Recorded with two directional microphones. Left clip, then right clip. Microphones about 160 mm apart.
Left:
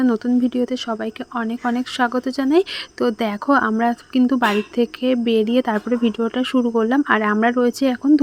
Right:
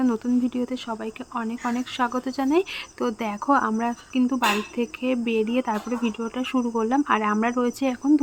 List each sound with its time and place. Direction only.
0.0 s speech: 35° left (ahead or behind)